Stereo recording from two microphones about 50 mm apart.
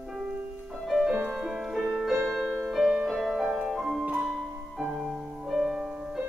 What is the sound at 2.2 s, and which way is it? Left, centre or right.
Music, centre.